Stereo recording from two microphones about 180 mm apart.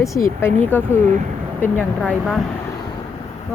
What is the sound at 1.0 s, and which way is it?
Speech, 40° right (ahead or behind).